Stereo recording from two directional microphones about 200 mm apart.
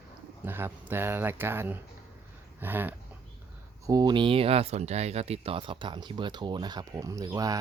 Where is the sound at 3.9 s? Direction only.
20° right (ahead or behind).